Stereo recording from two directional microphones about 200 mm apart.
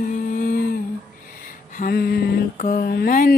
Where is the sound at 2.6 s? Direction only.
45° left (ahead or behind).